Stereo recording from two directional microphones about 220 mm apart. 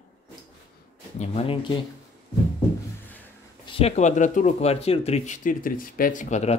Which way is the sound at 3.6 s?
25° left (ahead or behind).